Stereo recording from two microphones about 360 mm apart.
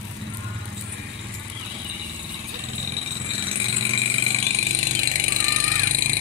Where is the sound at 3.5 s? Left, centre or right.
Centre.